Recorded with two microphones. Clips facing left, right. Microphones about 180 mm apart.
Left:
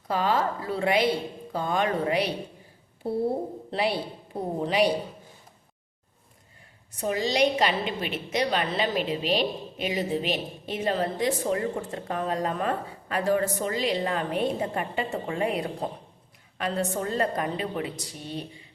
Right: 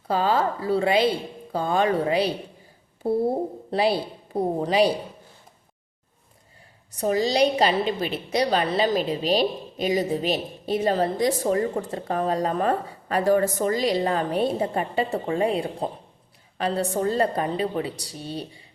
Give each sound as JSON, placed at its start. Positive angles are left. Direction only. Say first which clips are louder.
{"t": 0.1, "sound": "a woman's voice", "louder": "right 3 dB", "side_deg": -30}
{"t": 3.7, "sound": "a woman's voice", "louder": "right 5 dB", "side_deg": -35}
{"t": 6.9, "sound": "a woman's voice", "louder": "right 4 dB", "side_deg": -35}